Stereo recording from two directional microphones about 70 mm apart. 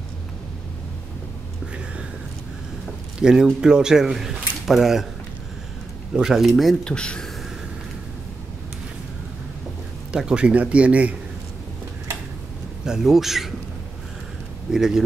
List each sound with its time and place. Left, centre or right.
3.2 s speech: centre
6.1 s speech: centre
6.8 s speech: centre
10.1 s speech: centre
12.8 s speech: centre
14.7 s speech: centre